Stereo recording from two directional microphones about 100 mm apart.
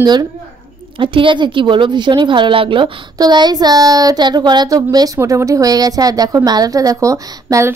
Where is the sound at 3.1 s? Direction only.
45° right (ahead or behind).